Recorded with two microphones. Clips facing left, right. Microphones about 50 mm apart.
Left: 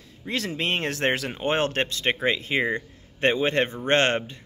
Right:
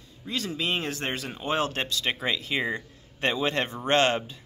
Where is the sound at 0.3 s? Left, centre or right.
Left.